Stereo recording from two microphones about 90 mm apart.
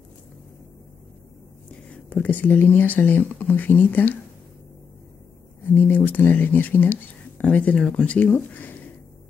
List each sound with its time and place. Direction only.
2.0 s speech: 20° left (ahead or behind)
5.7 s speech: 20° left (ahead or behind)